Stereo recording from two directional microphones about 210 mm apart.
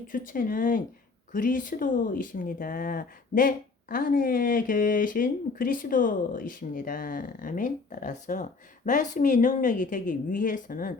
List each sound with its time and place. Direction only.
0.1 s speech: 40° left (ahead or behind)